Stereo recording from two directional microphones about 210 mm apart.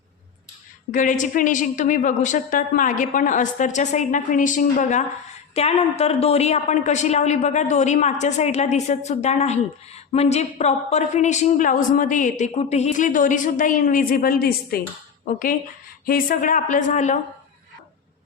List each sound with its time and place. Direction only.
0.9 s a woman's voice: 40° left (ahead or behind)
16.0 s a woman's voice: 40° left (ahead or behind)